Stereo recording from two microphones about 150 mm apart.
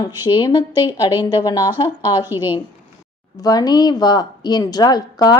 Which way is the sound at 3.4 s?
25° left (ahead or behind).